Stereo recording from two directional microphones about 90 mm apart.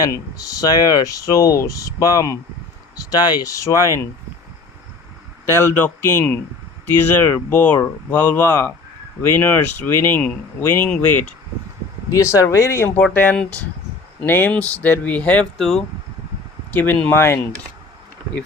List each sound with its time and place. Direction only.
0.1 s speech: 40° left (ahead or behind)
3.5 s speech: 35° left (ahead or behind)
5.5 s speech: 25° left (ahead or behind)
10.8 s speech: 10° left (ahead or behind)
12.1 s speech: 35° left (ahead or behind)
13.0 s speech: 20° left (ahead or behind)
15.5 s speech: 5° left (ahead or behind)
16.7 s speech: 20° left (ahead or behind)